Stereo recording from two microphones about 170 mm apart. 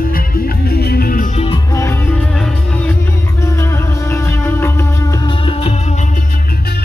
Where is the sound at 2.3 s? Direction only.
5° left (ahead or behind); by 6.0 s 40° left (ahead or behind).